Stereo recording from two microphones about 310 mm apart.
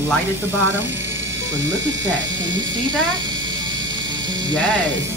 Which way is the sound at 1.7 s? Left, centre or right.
Right.